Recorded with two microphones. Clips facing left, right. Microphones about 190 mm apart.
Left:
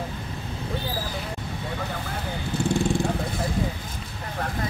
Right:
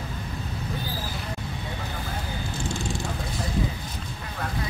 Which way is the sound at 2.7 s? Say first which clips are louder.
Left 10 dB; 55° left (ahead or behind).